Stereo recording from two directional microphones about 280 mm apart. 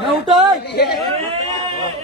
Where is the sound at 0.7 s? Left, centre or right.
Left.